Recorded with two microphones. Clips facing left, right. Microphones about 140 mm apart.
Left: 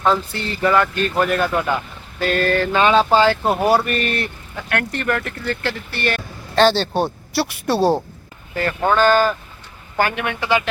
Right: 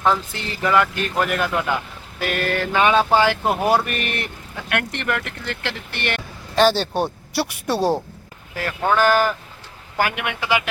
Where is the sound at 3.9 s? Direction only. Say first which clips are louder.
Left 5 dB; 15° right (ahead or behind).